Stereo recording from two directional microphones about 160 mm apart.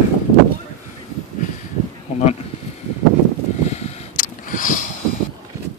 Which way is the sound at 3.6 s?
45° left (ahead or behind).